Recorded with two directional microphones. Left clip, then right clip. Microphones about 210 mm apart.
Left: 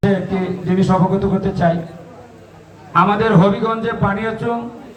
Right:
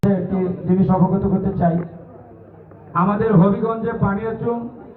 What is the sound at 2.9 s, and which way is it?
A man's voice, 45° left (ahead or behind).